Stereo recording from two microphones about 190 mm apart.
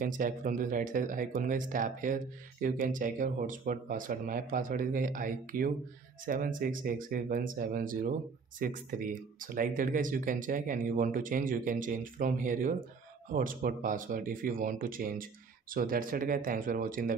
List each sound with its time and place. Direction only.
0.0 s speech: 45° right (ahead or behind)